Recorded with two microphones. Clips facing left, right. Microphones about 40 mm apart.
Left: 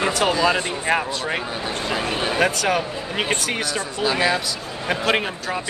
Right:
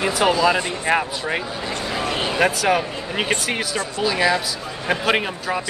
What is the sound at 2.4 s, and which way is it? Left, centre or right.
Speech, centre.